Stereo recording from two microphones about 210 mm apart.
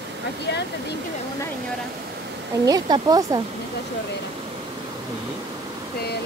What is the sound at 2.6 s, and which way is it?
Speech, 15° right (ahead or behind).